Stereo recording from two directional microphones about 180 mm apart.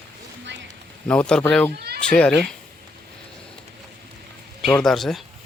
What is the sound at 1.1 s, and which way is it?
Speech, 5° left (ahead or behind).